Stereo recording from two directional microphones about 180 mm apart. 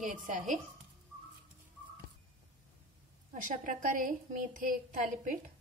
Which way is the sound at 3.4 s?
45° right (ahead or behind).